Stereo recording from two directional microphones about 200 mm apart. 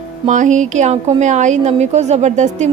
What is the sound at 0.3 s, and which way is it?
A woman's voice, 40° right (ahead or behind).